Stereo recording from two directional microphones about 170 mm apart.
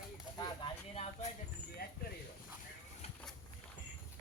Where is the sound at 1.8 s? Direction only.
65° left (ahead or behind).